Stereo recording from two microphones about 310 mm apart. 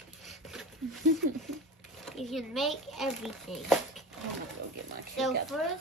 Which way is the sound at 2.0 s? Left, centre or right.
Centre.